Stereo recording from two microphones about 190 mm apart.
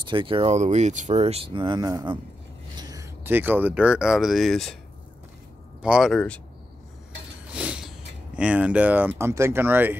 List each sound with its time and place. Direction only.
0.0 s speech: 25° right (ahead or behind); by 4.7 s centre (ahead or behind)
5.8 s speech: 5° right (ahead or behind)
6.1 s speech: 5° left (ahead or behind)
7.5 s a sound: 5° right (ahead or behind)
8.4 s speech: 5° right (ahead or behind)